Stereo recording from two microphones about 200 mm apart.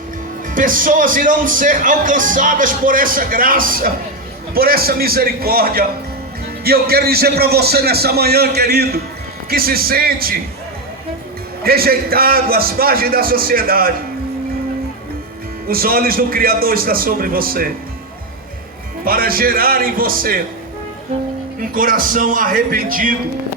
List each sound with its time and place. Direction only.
0.5 s speech: 45° right (ahead or behind)
11.6 s speech: 50° right (ahead or behind)
15.6 s speech: 45° right (ahead or behind)
19.0 s speech: 45° right (ahead or behind)
21.7 s speech: 45° right (ahead or behind)